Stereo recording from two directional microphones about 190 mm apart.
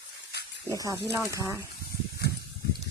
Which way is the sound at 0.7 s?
20° right (ahead or behind).